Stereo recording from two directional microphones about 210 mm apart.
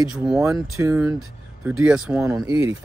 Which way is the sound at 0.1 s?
5° right (ahead or behind).